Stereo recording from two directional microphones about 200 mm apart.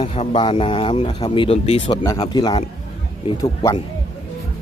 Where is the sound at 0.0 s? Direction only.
25° left (ahead or behind).